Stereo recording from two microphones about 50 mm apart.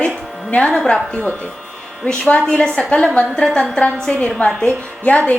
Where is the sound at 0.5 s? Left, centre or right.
Left.